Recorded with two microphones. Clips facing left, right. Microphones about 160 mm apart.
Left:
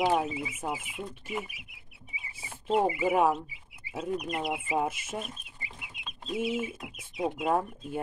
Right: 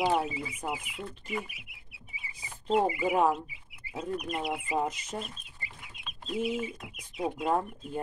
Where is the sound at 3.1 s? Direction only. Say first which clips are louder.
Left 1 dB; 10° left (ahead or behind).